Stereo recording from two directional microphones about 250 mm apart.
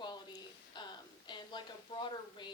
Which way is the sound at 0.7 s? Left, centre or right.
Centre.